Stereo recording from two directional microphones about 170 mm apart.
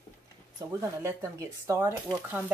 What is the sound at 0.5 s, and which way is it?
Speech, 15° right (ahead or behind).